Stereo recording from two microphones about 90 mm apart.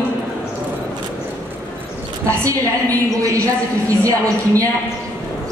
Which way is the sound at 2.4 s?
40° right (ahead or behind).